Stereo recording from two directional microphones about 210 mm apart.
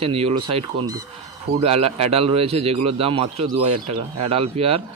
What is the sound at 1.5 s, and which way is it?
Speech, 30° right (ahead or behind).